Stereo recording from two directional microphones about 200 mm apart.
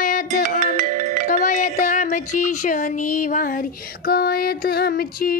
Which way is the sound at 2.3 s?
40° left (ahead or behind).